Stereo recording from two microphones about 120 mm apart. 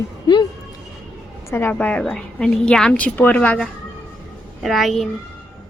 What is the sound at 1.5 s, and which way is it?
A woman's voice, 15° left (ahead or behind).